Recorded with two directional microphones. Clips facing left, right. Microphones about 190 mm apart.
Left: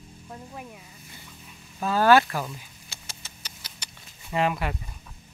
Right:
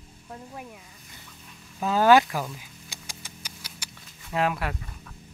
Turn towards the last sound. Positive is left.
turn(degrees=0)  # may be behind; listen again after turning